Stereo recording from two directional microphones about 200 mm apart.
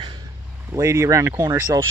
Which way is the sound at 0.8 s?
15° right (ahead or behind).